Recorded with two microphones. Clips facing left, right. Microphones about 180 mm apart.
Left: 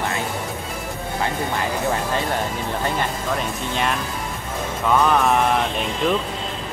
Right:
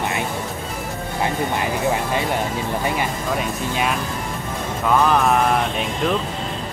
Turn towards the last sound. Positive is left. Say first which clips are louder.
# even
turn(degrees=0)  # may be behind; listen again after turning